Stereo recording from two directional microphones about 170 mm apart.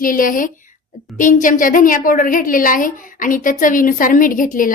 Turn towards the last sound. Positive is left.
turn(degrees=55)  # may be behind; listen again after turning